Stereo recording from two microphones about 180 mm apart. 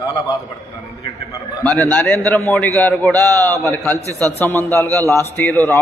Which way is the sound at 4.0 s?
15° right (ahead or behind).